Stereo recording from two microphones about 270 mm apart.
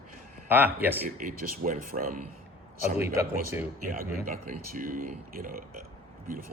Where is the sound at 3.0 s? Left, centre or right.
Centre.